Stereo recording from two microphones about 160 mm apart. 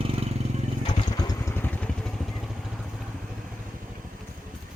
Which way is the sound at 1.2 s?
25° left (ahead or behind).